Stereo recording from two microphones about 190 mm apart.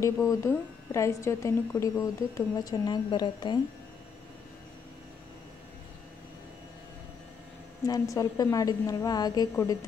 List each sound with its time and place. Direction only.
0.0 s a woman's voice: 15° left (ahead or behind)
7.8 s a woman's voice: 20° left (ahead or behind)